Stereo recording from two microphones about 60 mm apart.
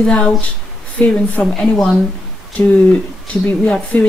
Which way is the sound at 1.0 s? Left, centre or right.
Centre.